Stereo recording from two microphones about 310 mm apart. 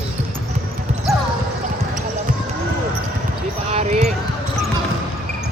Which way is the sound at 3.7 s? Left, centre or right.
Centre.